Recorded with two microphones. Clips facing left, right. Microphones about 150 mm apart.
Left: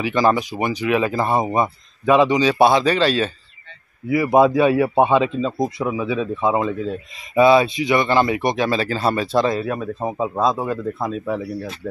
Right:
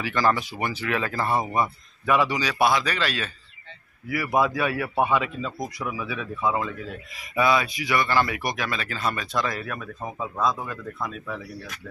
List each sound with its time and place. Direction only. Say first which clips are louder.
0.0 s a man's voice: left 6 dB; 20° left (ahead or behind)